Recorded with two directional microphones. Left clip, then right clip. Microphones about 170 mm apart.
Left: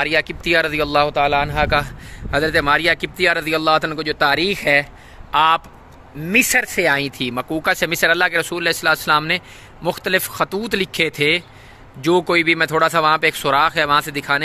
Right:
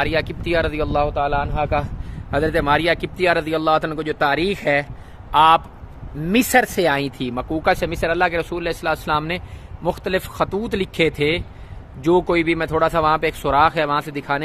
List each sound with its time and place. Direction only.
0.0 s speech: centre (ahead or behind)
0.9 s speech: 20° left (ahead or behind)
2.3 s speech: 5° right (ahead or behind)
6.2 s speech: 25° right (ahead or behind); by 14.4 s centre (ahead or behind)